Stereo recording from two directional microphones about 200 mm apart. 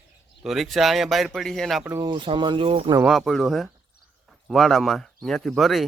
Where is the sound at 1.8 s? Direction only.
15° right (ahead or behind).